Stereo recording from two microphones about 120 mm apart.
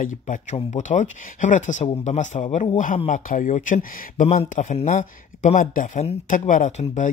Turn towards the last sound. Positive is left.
turn(degrees=80)